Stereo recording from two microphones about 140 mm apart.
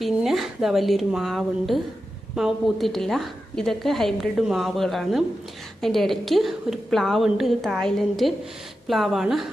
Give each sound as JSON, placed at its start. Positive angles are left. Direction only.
{"t": 0.0, "sound": "a woman's voice", "side_deg": 0}